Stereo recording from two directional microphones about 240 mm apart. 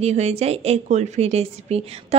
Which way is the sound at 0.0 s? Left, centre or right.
Right.